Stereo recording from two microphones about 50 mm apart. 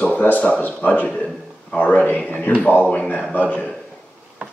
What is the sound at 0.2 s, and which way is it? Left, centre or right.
A man's voice, left.